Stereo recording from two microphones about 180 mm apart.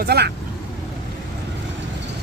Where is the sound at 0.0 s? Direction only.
65° right (ahead or behind).